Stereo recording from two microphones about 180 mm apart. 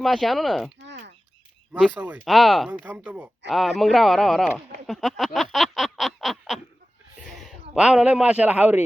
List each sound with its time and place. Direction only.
0.0 s speech: centre (ahead or behind)
0.9 s a sound: 75° right (ahead or behind)
1.9 s speech: 10° right (ahead or behind)
2.2 s speech: centre (ahead or behind)
4.9 s a sound: centre (ahead or behind)
7.3 s speech: centre (ahead or behind)